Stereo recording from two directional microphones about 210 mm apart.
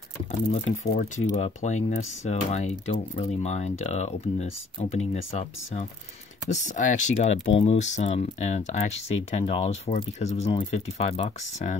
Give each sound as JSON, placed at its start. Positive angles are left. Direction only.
{"t": 0.8, "sound": "speech", "side_deg": 35}